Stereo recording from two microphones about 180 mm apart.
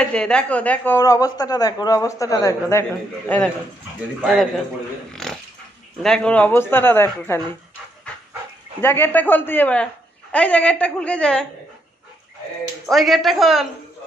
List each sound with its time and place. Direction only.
0.0 s a woman's voice: 5° left (ahead or behind)
5.2 s dog: centre (ahead or behind)
6.0 s a woman's voice: 5° left (ahead or behind)
8.8 s a woman's voice: 10° left (ahead or behind)
12.8 s speech: centre (ahead or behind)